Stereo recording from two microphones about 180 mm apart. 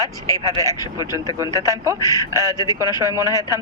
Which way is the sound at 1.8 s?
20° right (ahead or behind).